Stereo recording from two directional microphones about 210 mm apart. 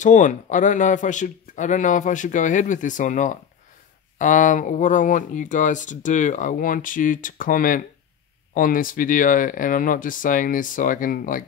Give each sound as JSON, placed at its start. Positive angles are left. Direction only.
{"t": 0.0, "sound": "speech", "side_deg": 35}